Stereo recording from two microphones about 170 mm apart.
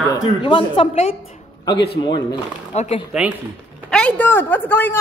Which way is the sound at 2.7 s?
40° left (ahead or behind).